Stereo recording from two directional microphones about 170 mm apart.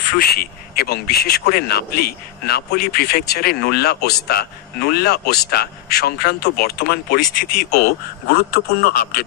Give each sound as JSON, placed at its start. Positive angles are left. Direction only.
{"t": 0.0, "sound": "speech", "side_deg": 65}